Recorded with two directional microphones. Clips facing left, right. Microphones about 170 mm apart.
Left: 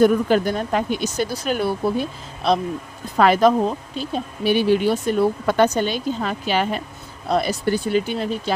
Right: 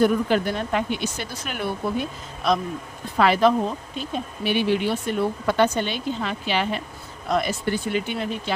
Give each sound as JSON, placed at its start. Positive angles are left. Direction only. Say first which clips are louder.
{"t": 0.0, "sound": "speech", "louder": "left 4 dB", "side_deg": 40}
{"t": 3.2, "sound": "speech", "louder": "left 3 dB", "side_deg": 45}